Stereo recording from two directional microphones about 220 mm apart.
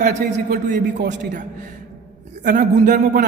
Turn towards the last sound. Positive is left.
turn(degrees=-40)  # may be behind; listen again after turning